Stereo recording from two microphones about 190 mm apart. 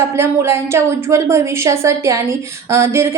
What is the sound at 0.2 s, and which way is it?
A woman's voice, 15° right (ahead or behind).